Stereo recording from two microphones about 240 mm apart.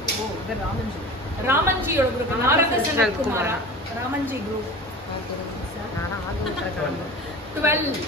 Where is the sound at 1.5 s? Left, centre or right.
Centre.